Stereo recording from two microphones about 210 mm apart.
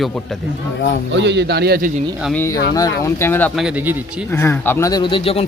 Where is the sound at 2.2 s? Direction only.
10° left (ahead or behind); by 3.9 s 5° right (ahead or behind).